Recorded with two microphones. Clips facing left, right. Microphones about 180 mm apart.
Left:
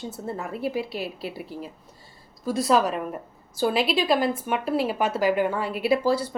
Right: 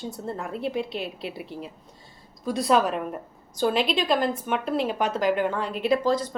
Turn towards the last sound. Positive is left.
turn(degrees=10)  # may be behind; listen again after turning